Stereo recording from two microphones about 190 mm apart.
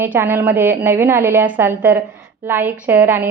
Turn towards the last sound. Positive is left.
turn(degrees=-10)  # may be behind; listen again after turning